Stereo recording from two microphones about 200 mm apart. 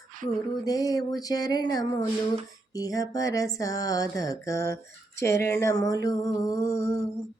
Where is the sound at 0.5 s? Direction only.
20° left (ahead or behind).